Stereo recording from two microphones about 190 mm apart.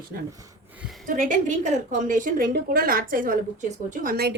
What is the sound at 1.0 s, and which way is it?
A woman's voice, 40° right (ahead or behind).